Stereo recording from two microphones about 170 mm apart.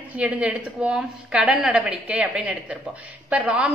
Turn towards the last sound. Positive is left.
turn(degrees=-10)  # may be behind; listen again after turning